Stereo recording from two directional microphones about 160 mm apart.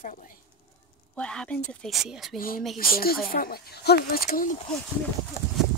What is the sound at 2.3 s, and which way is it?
Speech, 65° left (ahead or behind).